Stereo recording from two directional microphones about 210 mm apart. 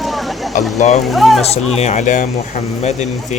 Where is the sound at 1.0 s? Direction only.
Centre (ahead or behind).